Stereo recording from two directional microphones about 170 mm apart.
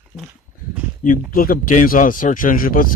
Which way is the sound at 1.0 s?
55° left (ahead or behind).